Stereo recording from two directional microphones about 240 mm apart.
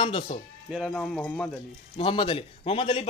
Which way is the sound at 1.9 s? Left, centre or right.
Left.